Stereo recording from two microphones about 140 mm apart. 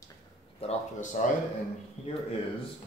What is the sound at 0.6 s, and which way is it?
Speech, 45° left (ahead or behind).